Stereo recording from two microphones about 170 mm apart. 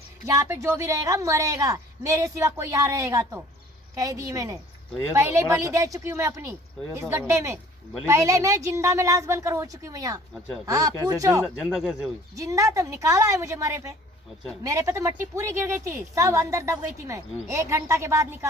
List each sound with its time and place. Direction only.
0.3 s a woman's voice: 15° right (ahead or behind)
11.4 s speech: centre (ahead or behind)
12.4 s a woman's voice: 20° right (ahead or behind)